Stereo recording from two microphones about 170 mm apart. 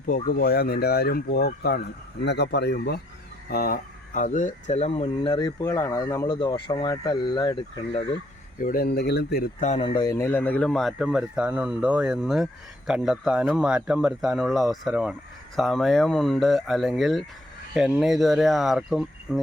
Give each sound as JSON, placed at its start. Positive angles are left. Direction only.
{"t": 0.3, "sound": "speech", "side_deg": 60}
{"t": 3.5, "sound": "speech", "side_deg": 60}
{"t": 8.6, "sound": "speech", "side_deg": 60}
{"t": 9.6, "sound": "speech", "side_deg": 40}
{"t": 9.9, "sound": "speech", "side_deg": 20}